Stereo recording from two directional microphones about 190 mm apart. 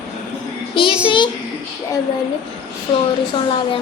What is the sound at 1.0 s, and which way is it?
Speech, 25° left (ahead or behind).